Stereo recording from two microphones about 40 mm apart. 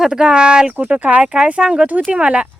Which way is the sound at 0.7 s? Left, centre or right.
Right.